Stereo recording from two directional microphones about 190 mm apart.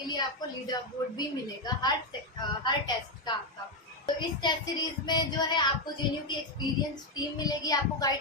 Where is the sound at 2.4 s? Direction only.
25° left (ahead or behind).